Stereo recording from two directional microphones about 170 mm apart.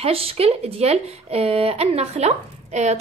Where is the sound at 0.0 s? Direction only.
35° right (ahead or behind).